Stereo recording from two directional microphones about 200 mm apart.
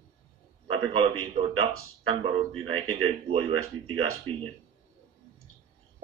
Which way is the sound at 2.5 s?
90° right.